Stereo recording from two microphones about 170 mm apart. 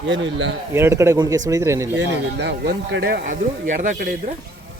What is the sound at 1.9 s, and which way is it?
Speech, 90° right.